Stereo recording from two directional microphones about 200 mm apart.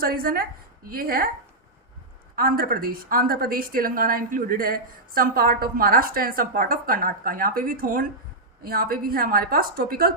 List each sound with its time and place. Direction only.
0.0 s a woman's voice: 50° right (ahead or behind)
2.3 s a woman's voice: 45° right (ahead or behind)